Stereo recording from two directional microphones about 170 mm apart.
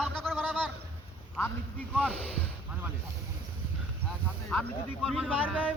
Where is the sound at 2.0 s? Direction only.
10° right (ahead or behind).